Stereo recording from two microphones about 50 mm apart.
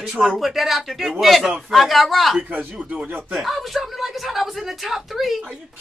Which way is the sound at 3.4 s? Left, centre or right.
Centre.